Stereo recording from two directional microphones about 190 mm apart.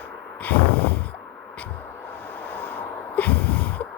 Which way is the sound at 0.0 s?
10° left (ahead or behind).